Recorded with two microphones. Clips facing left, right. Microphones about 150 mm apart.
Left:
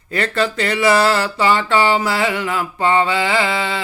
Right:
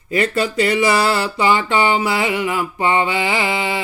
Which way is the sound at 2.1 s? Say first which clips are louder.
Even; 10° right (ahead or behind).